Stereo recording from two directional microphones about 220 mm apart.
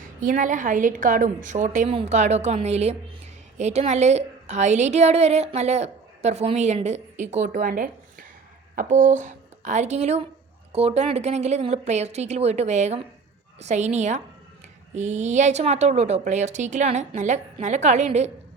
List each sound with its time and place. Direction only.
0.2 s a woman's voice: 35° right (ahead or behind)